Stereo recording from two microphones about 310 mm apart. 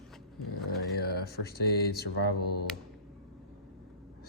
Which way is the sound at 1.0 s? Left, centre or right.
Left.